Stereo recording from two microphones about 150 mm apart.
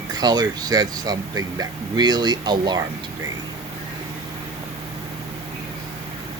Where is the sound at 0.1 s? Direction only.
25° right (ahead or behind).